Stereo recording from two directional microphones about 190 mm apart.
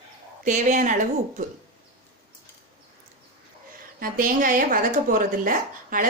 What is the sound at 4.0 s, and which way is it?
Speech, 45° right (ahead or behind).